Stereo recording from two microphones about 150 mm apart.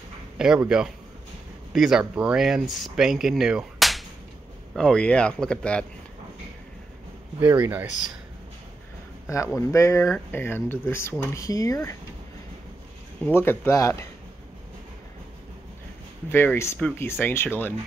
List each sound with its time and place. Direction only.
0.4 s speech: 5° right (ahead or behind)
7.3 s speech: 15° right (ahead or behind)
9.3 s speech: 20° left (ahead or behind)
13.2 s speech: 15° left (ahead or behind)
16.3 s speech: 15° left (ahead or behind)